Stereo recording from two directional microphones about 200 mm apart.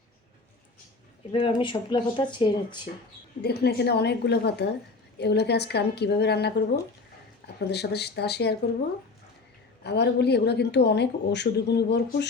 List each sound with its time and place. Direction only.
1.3 s speech: 25° left (ahead or behind)
3.4 s a woman's voice: 55° left (ahead or behind)
9.8 s a woman's voice: 55° left (ahead or behind)